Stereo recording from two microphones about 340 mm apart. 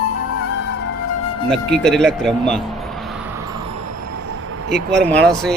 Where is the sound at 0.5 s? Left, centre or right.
Left.